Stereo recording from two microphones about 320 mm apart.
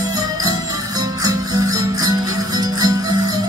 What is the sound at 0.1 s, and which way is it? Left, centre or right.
Music, centre.